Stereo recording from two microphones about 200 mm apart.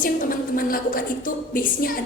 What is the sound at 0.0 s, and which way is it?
A woman's voice, 45° left (ahead or behind).